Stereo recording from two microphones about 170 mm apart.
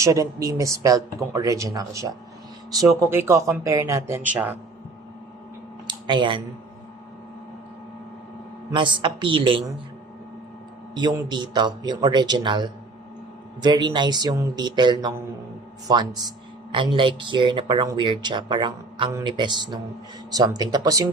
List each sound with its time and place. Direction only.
0.0 s speech: 20° right (ahead or behind)
5.9 s speech: 25° right (ahead or behind)
8.7 s a woman's voice: 30° right (ahead or behind)
10.9 s speech: 25° right (ahead or behind)